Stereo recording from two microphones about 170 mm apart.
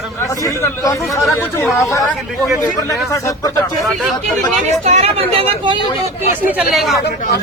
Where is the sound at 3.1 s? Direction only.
20° left (ahead or behind).